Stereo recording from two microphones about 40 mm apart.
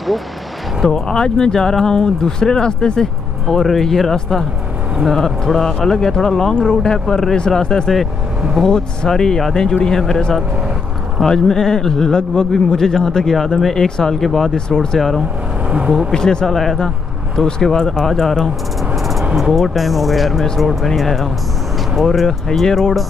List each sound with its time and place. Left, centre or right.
0.8 s speech: centre
3.4 s speech: centre
13.8 s speech: centre
14.2 s speech: centre
14.5 s speech: centre
15.0 s speech: centre
16.1 s speech: centre
18.9 s a sound: centre
19.5 s speech: centre